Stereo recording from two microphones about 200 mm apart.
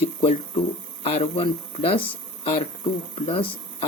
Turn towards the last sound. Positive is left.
turn(degrees=30)  # may be behind; listen again after turning